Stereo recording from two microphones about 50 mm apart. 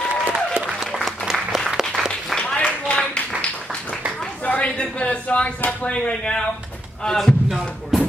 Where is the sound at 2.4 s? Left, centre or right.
Centre.